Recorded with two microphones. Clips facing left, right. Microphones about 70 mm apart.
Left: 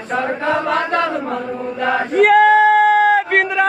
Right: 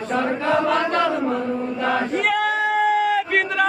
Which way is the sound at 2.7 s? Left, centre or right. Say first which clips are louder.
Left 7 dB; left.